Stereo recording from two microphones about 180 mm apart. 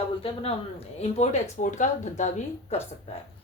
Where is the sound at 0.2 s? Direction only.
30° left (ahead or behind).